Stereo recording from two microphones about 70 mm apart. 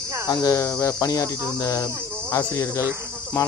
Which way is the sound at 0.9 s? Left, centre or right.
Left.